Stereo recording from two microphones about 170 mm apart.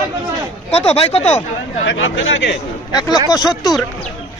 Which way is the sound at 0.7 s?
35° left (ahead or behind).